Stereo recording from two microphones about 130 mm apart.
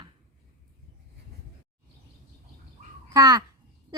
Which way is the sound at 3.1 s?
30° right (ahead or behind).